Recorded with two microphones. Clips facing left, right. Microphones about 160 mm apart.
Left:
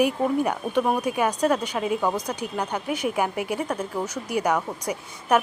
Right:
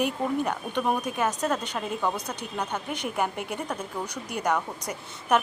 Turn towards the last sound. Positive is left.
turn(degrees=10)  # may be behind; listen again after turning